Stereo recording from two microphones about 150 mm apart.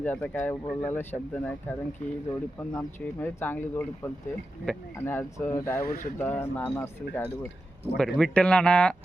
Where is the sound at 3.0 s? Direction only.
10° left (ahead or behind).